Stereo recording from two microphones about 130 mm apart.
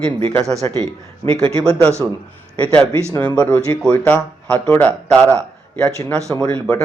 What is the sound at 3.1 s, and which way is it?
Speech, 10° left (ahead or behind).